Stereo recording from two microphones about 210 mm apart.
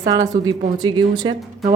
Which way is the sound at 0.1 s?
20° right (ahead or behind).